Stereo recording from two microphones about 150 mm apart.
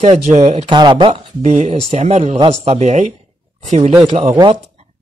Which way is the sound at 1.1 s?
50° right (ahead or behind).